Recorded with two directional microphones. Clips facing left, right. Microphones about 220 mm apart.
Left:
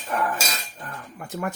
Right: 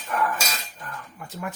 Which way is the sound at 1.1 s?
50° left (ahead or behind).